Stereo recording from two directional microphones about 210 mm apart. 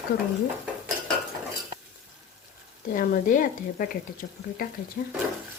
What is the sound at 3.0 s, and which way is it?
Speech, 40° left (ahead or behind).